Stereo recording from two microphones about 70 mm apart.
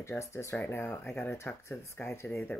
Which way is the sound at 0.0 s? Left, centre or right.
Left.